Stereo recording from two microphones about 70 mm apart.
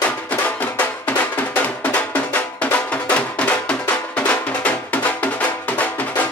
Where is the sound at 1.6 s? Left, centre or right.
Centre.